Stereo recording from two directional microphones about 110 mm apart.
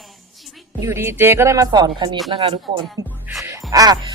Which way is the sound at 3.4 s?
30° right (ahead or behind).